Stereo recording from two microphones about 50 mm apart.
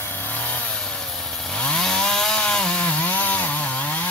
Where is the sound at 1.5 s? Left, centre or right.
Left.